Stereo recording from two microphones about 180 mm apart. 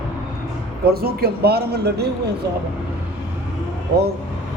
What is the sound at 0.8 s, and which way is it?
Speech, 60° right (ahead or behind).